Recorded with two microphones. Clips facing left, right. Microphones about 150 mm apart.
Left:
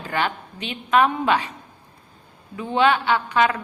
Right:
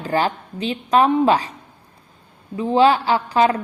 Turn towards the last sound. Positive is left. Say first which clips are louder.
# right 3 dB
turn(degrees=-35)  # may be behind; listen again after turning